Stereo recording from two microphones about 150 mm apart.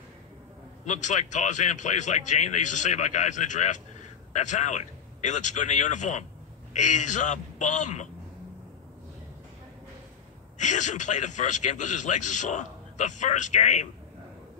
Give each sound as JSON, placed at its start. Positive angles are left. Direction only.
{"t": 0.8, "sound": "speech", "side_deg": 55}
{"t": 10.6, "sound": "a man's voice", "side_deg": 55}